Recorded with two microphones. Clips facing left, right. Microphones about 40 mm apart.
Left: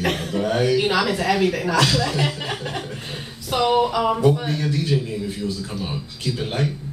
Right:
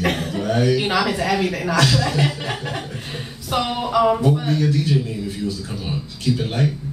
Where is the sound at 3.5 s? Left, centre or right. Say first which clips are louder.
Left 2 dB; centre.